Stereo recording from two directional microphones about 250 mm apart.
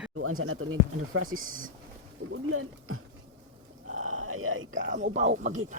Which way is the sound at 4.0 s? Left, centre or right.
Right.